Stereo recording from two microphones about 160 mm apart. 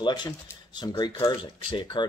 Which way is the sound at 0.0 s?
30° left (ahead or behind).